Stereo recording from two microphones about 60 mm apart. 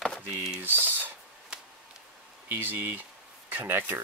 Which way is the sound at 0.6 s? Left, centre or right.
Right.